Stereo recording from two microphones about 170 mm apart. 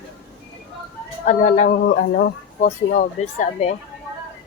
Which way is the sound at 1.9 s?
65° left (ahead or behind).